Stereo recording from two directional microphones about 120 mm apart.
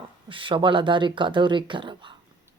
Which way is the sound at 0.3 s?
45° right (ahead or behind).